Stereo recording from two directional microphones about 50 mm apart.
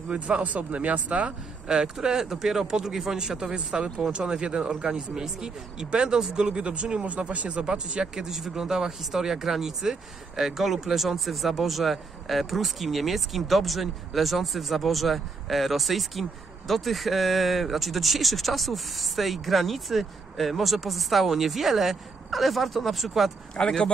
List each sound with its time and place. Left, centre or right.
0.1 s speech: right
1.7 s speech: centre
23.5 s speech: centre